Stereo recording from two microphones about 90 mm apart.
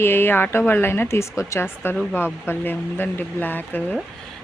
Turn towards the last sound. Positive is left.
turn(degrees=20)  # may be behind; listen again after turning